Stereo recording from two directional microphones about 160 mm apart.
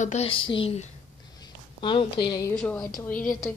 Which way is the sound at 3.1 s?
55° left (ahead or behind).